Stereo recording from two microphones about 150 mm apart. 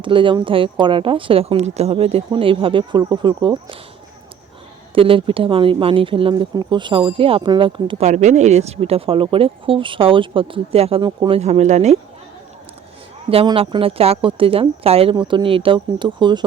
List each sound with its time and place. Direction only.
0.0 s a woman's voice: 35° right (ahead or behind)
4.9 s a woman's voice: 35° right (ahead or behind)
8.0 s a woman's voice: 50° right (ahead or behind); by 11.3 s 35° right (ahead or behind)
11.3 s speech: 45° right (ahead or behind)
13.3 s a woman's voice: 35° right (ahead or behind)